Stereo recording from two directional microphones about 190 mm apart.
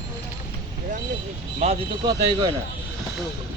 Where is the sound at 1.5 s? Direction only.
35° right (ahead or behind).